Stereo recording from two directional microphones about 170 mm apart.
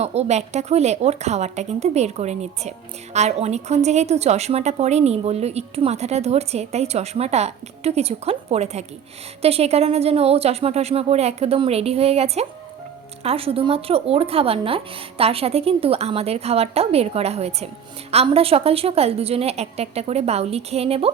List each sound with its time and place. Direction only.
0.0 s a woman's voice: 40° right (ahead or behind)